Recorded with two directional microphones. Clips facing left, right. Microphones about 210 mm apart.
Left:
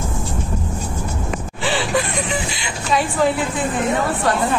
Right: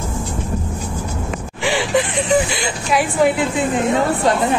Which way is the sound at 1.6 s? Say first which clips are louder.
Right 3 dB; 15° right (ahead or behind).